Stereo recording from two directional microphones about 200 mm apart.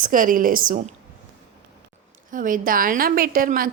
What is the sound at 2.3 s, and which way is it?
Speech, 40° right (ahead or behind).